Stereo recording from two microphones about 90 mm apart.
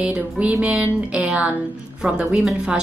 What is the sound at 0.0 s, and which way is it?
A woman's voice, 15° right (ahead or behind).